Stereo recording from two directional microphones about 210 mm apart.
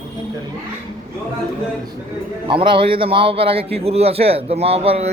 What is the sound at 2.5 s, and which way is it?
A man's voice, 25° right (ahead or behind).